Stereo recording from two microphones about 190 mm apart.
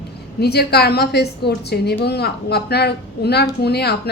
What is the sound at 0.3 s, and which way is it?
A woman's voice, 60° left (ahead or behind).